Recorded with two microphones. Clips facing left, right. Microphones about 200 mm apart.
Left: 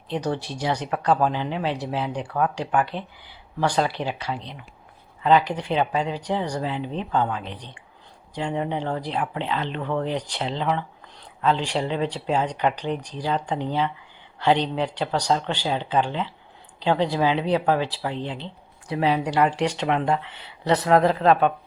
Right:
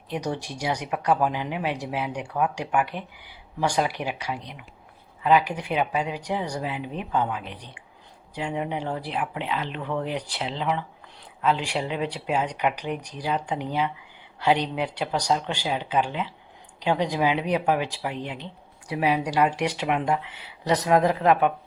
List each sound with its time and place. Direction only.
0.1 s speech: 10° right (ahead or behind)